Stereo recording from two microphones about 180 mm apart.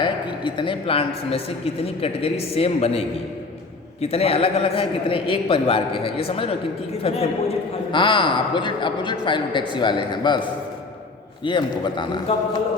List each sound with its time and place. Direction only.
0.0 s a woman's voice: 25° left (ahead or behind)
4.0 s a woman's voice: 35° left (ahead or behind)
11.4 s a man's voice: 25° left (ahead or behind)